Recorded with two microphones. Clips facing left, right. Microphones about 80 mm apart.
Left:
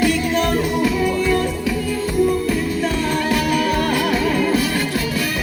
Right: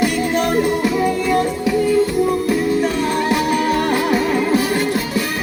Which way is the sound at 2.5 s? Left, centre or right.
Right.